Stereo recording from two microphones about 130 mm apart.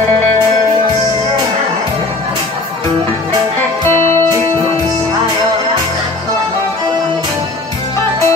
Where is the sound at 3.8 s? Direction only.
20° left (ahead or behind).